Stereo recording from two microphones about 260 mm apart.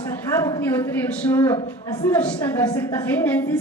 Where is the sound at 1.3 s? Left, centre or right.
Centre.